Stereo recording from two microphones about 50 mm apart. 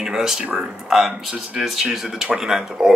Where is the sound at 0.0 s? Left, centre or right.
Centre.